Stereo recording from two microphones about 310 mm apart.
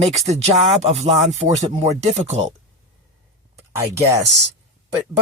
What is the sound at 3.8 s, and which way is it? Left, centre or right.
Speech, centre.